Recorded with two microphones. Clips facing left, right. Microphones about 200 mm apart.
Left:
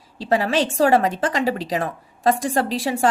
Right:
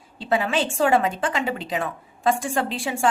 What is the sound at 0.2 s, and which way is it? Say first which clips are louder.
A woman's voice: left 3 dB; 40° left (ahead or behind).